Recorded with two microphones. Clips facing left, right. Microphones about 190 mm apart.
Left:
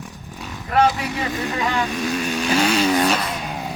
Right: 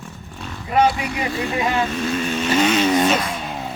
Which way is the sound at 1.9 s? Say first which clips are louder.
Right 1 dB; 10° left (ahead or behind).